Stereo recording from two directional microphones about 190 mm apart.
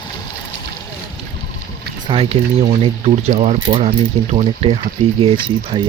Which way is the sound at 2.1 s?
30° right (ahead or behind).